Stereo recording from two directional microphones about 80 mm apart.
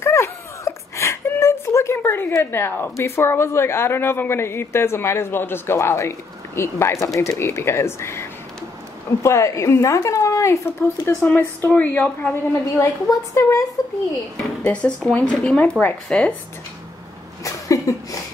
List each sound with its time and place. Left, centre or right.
0.0 s a sound: left
2.5 s a woman's voice: left
11.2 s a woman's voice: centre
13.1 s a woman's voice: left
14.3 s speech: centre
17.4 s a sound: left